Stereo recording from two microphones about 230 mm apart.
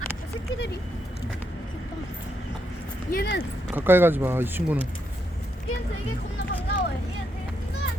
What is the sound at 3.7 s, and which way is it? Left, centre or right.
Speech, centre.